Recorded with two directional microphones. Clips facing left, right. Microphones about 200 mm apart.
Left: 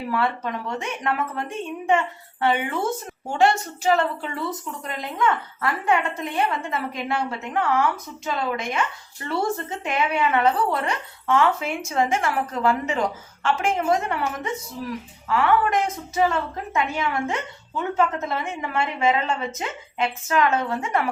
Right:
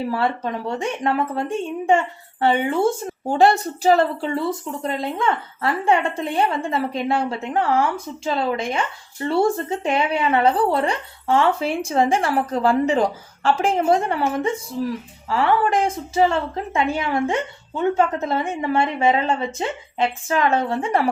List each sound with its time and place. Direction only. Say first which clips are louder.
0.1 s a woman's voice: right 2 dB; 30° right (ahead or behind)